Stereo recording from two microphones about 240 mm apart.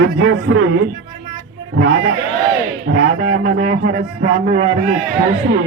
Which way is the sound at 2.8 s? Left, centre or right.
Right.